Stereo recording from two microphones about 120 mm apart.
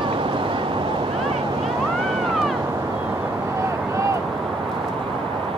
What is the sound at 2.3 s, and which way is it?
Cat, centre (ahead or behind).